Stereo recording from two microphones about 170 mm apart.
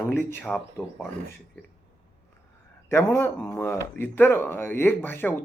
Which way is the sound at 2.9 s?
15° left (ahead or behind).